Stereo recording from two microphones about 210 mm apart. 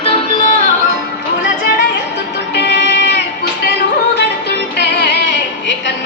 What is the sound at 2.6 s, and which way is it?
Music, 55° left (ahead or behind).